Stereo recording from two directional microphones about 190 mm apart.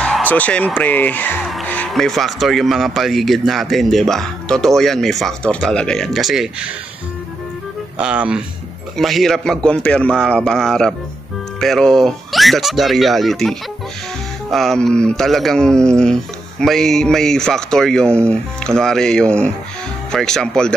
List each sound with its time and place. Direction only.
0.0 s speech: 5° left (ahead or behind)
8.0 s speech: 5° right (ahead or behind)